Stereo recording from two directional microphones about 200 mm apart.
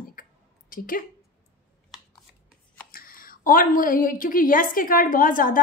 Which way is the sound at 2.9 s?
45° left (ahead or behind).